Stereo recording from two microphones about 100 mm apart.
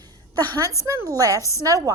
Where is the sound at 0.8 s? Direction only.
35° right (ahead or behind).